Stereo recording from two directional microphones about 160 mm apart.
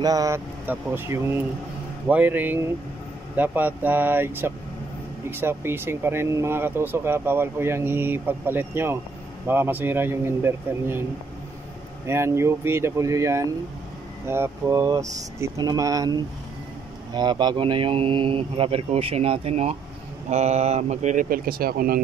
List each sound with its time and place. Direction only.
0.0 s speech: 20° right (ahead or behind)
12.1 s speech: 15° right (ahead or behind); by 22.0 s 70° right (ahead or behind)